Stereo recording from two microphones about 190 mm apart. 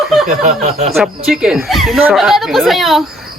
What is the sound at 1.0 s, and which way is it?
A woman's voice, 5° right (ahead or behind).